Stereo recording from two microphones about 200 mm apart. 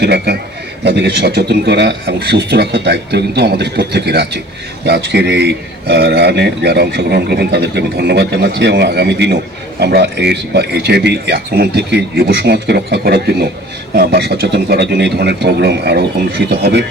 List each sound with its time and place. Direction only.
0.0 s a man's voice: 55° right (ahead or behind)